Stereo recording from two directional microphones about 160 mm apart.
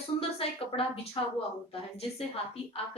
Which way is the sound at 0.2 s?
35° left (ahead or behind).